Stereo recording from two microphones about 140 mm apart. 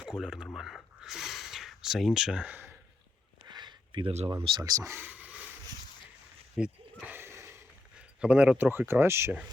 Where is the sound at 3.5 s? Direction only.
30° right (ahead or behind).